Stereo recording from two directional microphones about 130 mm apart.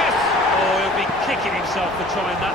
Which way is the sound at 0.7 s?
Centre (ahead or behind).